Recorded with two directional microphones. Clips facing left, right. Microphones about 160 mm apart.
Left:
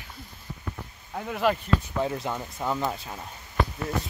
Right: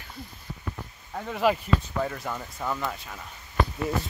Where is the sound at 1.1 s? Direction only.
5° left (ahead or behind).